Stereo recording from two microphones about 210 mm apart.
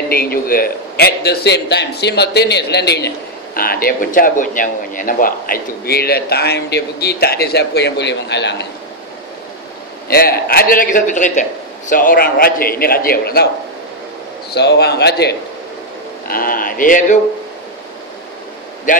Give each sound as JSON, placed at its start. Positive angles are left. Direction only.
{"t": 0.1, "sound": "speech", "side_deg": 45}
{"t": 10.0, "sound": "speech", "side_deg": 45}
{"t": 14.5, "sound": "speech", "side_deg": 50}
{"t": 18.9, "sound": "speech", "side_deg": 35}